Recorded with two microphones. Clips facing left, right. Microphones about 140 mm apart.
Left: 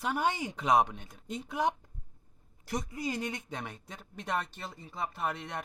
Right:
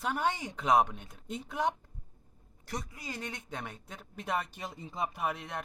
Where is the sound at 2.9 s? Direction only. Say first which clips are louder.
Left 7 dB; 20° left (ahead or behind).